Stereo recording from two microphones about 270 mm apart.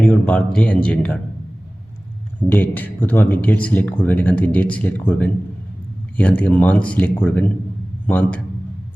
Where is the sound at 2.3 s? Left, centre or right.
Centre.